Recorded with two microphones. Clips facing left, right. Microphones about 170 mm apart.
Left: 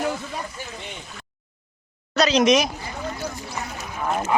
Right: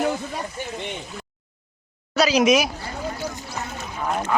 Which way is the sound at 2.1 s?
5° right (ahead or behind).